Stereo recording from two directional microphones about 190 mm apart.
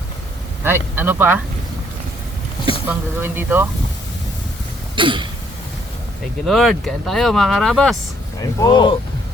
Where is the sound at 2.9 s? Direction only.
10° right (ahead or behind).